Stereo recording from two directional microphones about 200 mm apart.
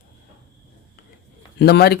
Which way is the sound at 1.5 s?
55° left (ahead or behind).